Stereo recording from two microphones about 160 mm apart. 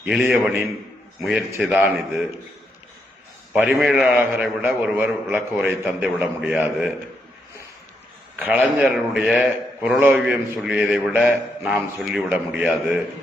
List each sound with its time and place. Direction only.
0.0 s a man's voice: 10° right (ahead or behind)
3.5 s a man's voice: 5° right (ahead or behind)
8.4 s a man's voice: 10° right (ahead or behind)